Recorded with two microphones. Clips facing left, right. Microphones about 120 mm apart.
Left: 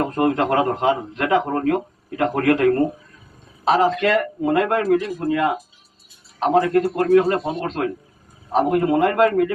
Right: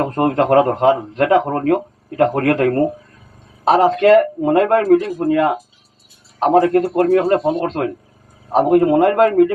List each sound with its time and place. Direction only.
0.0 s a man's voice: 45° right (ahead or behind)